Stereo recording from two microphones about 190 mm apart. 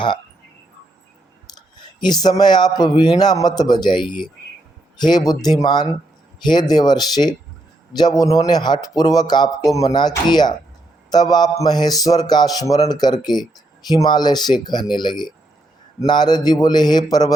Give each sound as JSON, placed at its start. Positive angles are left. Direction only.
{"t": 1.7, "sound": "speech", "side_deg": 25}